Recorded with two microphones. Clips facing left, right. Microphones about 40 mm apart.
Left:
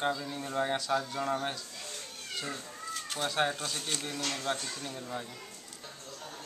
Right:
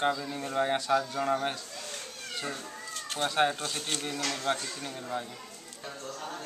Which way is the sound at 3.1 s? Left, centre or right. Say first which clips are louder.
Right 4 dB; centre.